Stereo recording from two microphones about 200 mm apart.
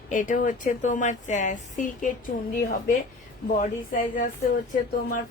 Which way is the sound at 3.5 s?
40° left (ahead or behind).